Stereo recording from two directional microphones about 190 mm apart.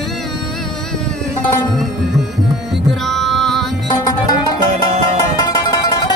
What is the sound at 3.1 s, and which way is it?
Music, centre (ahead or behind).